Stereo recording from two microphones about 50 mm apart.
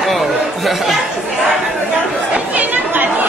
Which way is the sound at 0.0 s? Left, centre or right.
Centre.